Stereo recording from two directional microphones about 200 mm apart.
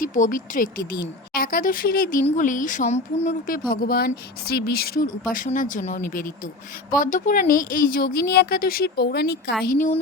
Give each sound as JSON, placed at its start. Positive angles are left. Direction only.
{"t": 0.0, "sound": "speech", "side_deg": 40}
{"t": 9.6, "sound": "speech", "side_deg": 45}